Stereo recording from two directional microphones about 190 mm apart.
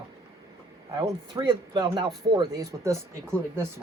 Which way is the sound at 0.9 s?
20° right (ahead or behind).